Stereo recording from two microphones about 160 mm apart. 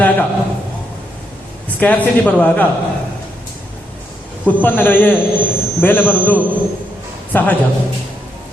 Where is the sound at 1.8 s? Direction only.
10° left (ahead or behind).